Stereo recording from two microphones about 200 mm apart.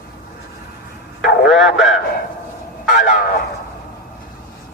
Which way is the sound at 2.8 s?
40° left (ahead or behind).